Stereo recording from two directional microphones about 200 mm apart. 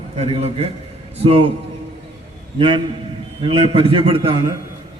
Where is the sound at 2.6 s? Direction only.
25° right (ahead or behind).